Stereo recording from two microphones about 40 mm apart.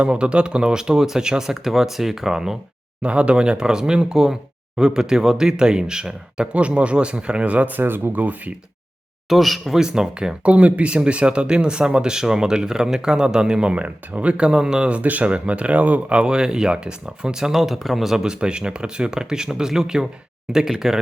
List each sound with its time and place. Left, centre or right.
0.0 s speech: right; by 2.6 s centre
3.0 s speech: right
6.5 s speech: right
7.8 s speech: right
8.1 s speech: right
9.3 s speech: centre
9.7 s speech: centre
10.4 s speech: right
13.8 s speech: right
16.1 s speech: right
17.5 s speech: centre
18.2 s speech: right